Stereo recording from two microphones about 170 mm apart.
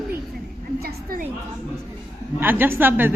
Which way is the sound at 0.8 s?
65° right (ahead or behind).